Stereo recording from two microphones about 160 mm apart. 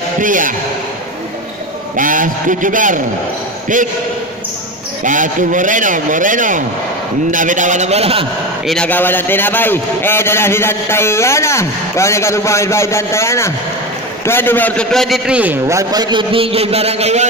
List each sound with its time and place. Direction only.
0.2 s a man's voice: 55° right (ahead or behind)
2.0 s a man's voice: 55° right (ahead or behind)
5.0 s a man's voice: 55° right (ahead or behind); by 8.3 s 40° right (ahead or behind)
8.6 s a man's voice: 5° left (ahead or behind); by 15.6 s 10° right (ahead or behind)
15.6 s a man's voice: 20° right (ahead or behind); by 17.3 s 45° right (ahead or behind)